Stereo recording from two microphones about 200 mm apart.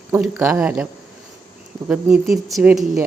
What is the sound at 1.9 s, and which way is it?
Speech, centre (ahead or behind).